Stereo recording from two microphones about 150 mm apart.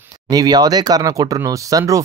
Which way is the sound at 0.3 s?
25° right (ahead or behind).